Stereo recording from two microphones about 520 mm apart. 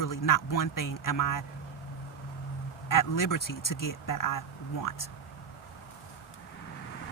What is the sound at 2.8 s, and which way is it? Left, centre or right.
Speech, left.